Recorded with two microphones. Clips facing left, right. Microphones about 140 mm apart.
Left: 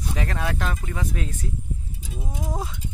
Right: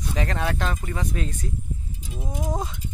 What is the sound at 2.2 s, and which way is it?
Speech, 20° right (ahead or behind).